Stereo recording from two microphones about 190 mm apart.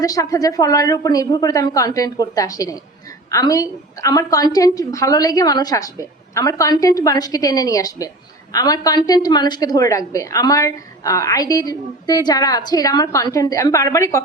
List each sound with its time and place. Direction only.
0.0 s a woman's voice: 20° left (ahead or behind)